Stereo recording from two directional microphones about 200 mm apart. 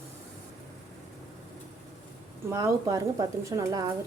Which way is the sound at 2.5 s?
15° right (ahead or behind).